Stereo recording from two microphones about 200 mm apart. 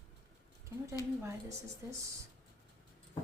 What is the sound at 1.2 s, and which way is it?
Speech, 15° right (ahead or behind).